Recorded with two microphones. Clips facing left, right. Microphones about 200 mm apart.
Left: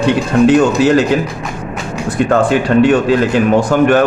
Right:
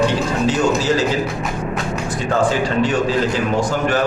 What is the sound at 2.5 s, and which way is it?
Speech, 65° left (ahead or behind).